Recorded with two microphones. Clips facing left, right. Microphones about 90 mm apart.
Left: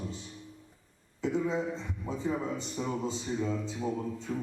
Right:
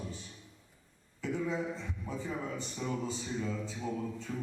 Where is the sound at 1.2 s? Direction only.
20° left (ahead or behind).